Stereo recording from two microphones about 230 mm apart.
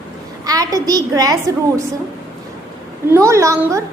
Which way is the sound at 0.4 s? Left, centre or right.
Centre.